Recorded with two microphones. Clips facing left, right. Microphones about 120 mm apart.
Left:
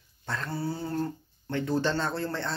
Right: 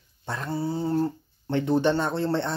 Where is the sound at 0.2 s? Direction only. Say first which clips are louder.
Right 3 dB; 20° right (ahead or behind).